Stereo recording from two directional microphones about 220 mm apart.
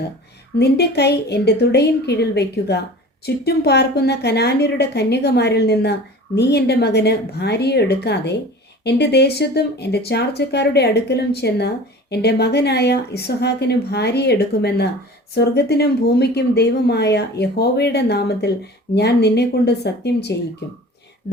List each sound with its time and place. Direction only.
0.6 s a woman's voice: 50° left (ahead or behind)